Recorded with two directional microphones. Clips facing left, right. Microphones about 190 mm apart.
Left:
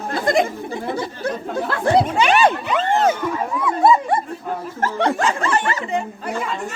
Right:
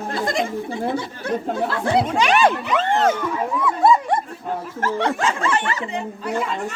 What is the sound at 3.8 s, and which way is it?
Dog, 5° left (ahead or behind).